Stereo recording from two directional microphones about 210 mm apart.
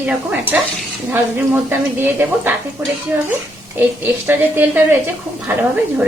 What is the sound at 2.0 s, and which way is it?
A woman's voice, 10° right (ahead or behind).